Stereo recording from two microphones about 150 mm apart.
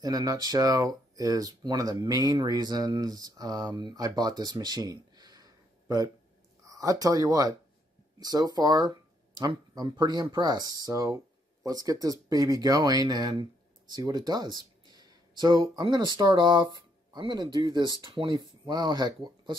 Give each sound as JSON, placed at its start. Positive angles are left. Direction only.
{"t": 0.0, "sound": "speech", "side_deg": -25}